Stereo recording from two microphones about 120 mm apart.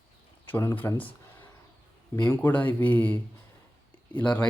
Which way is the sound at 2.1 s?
15° left (ahead or behind).